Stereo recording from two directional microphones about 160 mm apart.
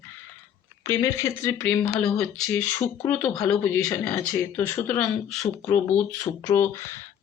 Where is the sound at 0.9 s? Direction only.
20° left (ahead or behind).